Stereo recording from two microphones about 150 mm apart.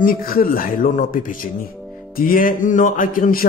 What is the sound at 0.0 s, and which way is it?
Speech, 75° left (ahead or behind).